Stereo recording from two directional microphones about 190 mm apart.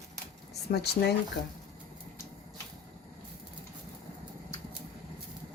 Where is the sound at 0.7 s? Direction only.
60° left (ahead or behind).